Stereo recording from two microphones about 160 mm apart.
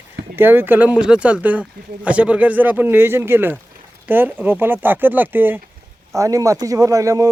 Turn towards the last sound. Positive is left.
turn(degrees=-20)  # may be behind; listen again after turning